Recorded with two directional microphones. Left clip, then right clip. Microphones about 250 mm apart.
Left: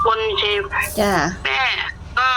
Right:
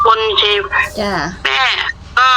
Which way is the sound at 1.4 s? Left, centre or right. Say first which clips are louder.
Right 5 dB; right.